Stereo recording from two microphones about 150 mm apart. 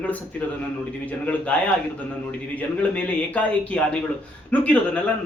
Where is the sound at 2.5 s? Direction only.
10° left (ahead or behind).